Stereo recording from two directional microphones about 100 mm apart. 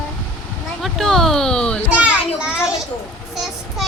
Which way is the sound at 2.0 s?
10° right (ahead or behind).